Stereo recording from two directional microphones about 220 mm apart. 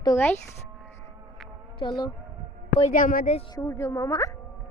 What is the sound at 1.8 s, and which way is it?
Speech, 20° left (ahead or behind).